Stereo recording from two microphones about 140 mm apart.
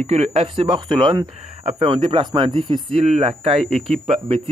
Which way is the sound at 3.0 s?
45° right (ahead or behind).